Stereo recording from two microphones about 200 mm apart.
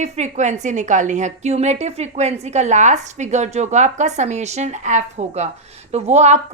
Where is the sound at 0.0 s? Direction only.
35° right (ahead or behind).